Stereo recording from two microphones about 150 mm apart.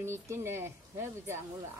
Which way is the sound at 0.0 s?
15° right (ahead or behind).